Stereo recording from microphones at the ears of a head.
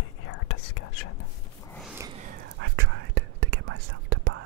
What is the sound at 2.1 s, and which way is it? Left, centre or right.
Whispering, right.